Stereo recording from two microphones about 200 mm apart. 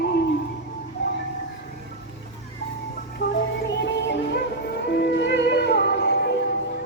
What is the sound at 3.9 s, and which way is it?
Music, 60° left (ahead or behind).